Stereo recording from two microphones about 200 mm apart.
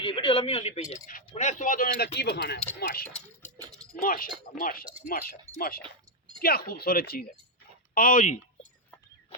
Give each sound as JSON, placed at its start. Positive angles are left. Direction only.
{"t": 0.0, "sound": "a sound", "side_deg": 25}
{"t": 1.3, "sound": "speech", "side_deg": 35}
{"t": 3.0, "sound": "speech", "side_deg": 5}
{"t": 4.0, "sound": "speech", "side_deg": 45}